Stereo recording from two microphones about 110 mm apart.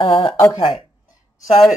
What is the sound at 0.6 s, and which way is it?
Speech, 55° left (ahead or behind).